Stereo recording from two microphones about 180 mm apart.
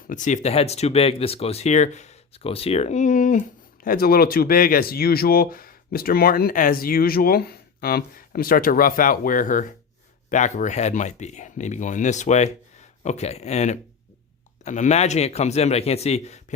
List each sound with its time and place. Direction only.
0.1 s speech: 45° left (ahead or behind)